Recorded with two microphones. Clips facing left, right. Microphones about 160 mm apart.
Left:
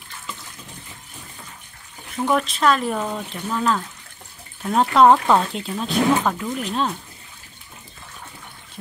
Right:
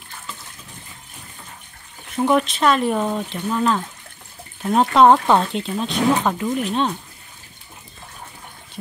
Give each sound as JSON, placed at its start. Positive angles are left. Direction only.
{"t": 2.2, "sound": "speech", "side_deg": 0}